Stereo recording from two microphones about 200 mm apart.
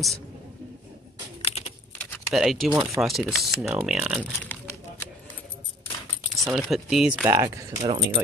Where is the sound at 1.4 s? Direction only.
30° left (ahead or behind).